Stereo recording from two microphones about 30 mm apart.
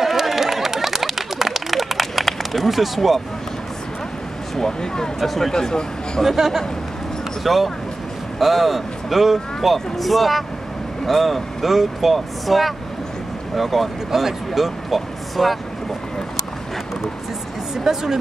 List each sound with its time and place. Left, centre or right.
0.0 s a sound: centre
2.2 s speech: centre
4.6 s speech: left
5.2 s speech: centre
5.5 s speech: left
6.2 s speech: centre
17.9 s speech: centre